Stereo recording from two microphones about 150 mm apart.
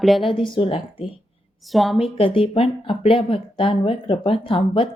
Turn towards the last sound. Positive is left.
turn(degrees=35)  # may be behind; listen again after turning